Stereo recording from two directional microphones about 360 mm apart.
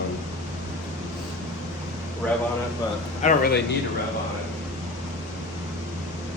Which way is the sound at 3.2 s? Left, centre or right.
Left.